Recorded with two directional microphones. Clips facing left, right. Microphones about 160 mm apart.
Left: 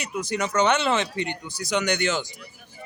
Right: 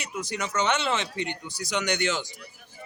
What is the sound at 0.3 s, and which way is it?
A man's voice, 55° left (ahead or behind).